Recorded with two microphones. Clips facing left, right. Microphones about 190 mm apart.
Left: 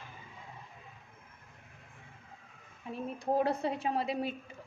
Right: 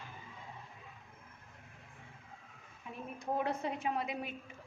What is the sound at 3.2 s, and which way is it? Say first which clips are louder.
A woman's voice: left 5 dB; 35° left (ahead or behind).